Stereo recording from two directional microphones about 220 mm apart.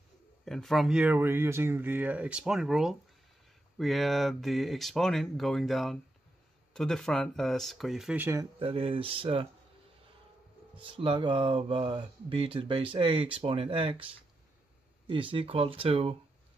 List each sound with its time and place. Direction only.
0.5 s speech: centre (ahead or behind)
8.5 s speech: 25° right (ahead or behind)
10.8 s speech: 25° right (ahead or behind)
15.0 s speech: 25° right (ahead or behind)